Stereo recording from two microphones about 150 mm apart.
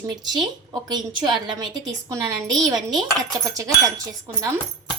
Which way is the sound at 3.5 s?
20° right (ahead or behind).